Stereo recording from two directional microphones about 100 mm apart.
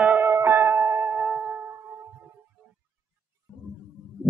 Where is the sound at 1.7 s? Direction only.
30° right (ahead or behind).